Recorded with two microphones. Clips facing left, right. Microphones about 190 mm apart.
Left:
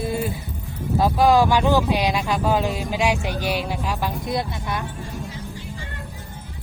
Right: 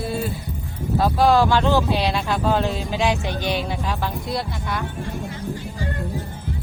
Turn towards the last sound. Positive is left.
turn(degrees=20)  # may be behind; listen again after turning